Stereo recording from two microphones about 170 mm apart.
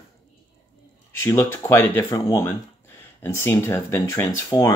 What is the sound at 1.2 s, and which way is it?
Speech, 15° left (ahead or behind).